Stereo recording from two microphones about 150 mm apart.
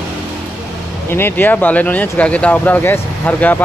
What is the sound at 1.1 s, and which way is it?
Speech, 15° left (ahead or behind).